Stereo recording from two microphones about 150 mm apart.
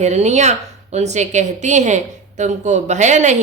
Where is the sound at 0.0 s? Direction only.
50° right (ahead or behind).